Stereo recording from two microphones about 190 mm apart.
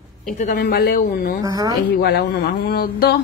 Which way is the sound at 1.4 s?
20° right (ahead or behind).